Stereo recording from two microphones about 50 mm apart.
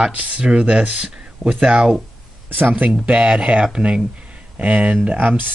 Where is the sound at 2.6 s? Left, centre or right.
Right.